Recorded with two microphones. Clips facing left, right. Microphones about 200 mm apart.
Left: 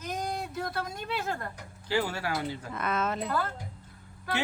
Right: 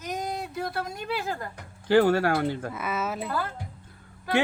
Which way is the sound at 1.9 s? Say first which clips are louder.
Right 10 dB; 55° right (ahead or behind).